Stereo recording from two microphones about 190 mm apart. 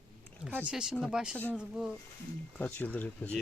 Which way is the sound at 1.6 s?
5° right (ahead or behind).